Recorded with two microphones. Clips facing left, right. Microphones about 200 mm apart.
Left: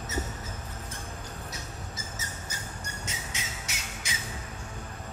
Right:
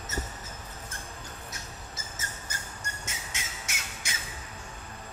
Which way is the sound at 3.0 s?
50° right (ahead or behind).